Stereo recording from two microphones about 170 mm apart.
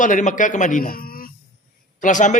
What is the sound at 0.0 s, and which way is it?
A man's voice, 45° left (ahead or behind).